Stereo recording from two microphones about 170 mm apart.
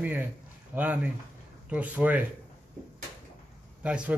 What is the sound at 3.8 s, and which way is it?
Speech, 5° right (ahead or behind).